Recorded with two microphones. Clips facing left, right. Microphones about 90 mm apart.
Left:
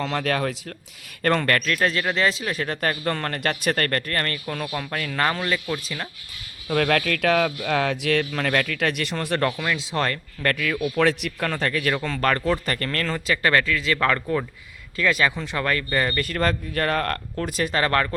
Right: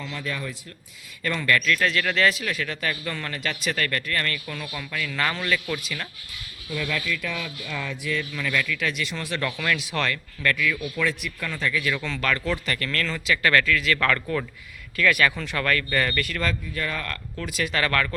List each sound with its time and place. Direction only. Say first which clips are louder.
0.0 s speech: left 8 dB; 70° left (ahead or behind)
1.2 s speech: left 3 dB; 55° left (ahead or behind); by 6.1 s 30° left (ahead or behind)
6.7 s speech: left 7 dB; 70° left (ahead or behind); by 9.6 s 45° left (ahead or behind)
9.6 s speech: left 1 dB; 30° left (ahead or behind); by 11.0 s 45° left (ahead or behind)
11.0 s speech: left 5 dB; 65° left (ahead or behind)
11.9 s speech: left 4 dB; 40° left (ahead or behind); by 16.2 s 25° left (ahead or behind)
16.2 s speech: left 4 dB; 40° left (ahead or behind)